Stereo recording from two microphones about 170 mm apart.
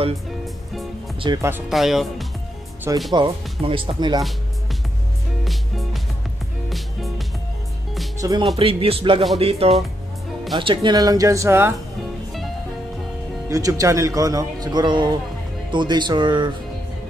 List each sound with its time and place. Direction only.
1.2 s speech: 25° right (ahead or behind)
1.7 s speech: centre (ahead or behind)
3.1 s speech: 30° right (ahead or behind)
5.4 s music: centre (ahead or behind)
8.2 s speech: 20° right (ahead or behind)
8.5 s speech: 30° right (ahead or behind); by 11.7 s 15° right (ahead or behind)
13.5 s speech: 20° right (ahead or behind)